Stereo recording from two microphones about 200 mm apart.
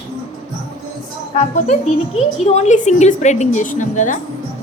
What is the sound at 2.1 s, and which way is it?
A woman's voice, 35° left (ahead or behind).